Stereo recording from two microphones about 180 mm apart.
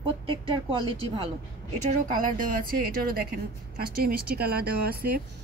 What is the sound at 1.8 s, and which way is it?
A woman's voice, 45° right (ahead or behind).